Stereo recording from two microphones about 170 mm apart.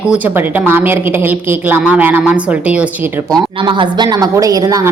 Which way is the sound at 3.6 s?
25° right (ahead or behind).